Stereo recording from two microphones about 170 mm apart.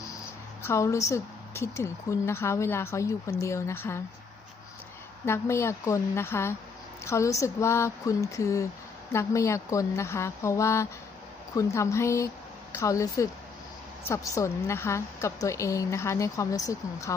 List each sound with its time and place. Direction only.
0.6 s speech: 15° left (ahead or behind)
5.2 s speech: 15° left (ahead or behind)